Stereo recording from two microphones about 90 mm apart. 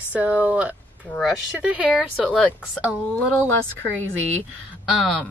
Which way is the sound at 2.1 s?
15° left (ahead or behind).